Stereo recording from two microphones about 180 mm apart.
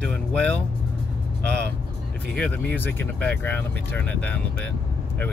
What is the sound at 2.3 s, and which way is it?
Speech, 10° left (ahead or behind).